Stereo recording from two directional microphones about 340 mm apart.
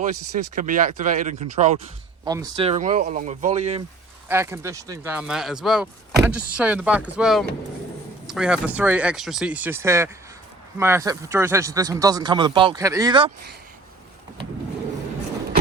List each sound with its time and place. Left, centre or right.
0.3 s speech: right
4.3 s speech: centre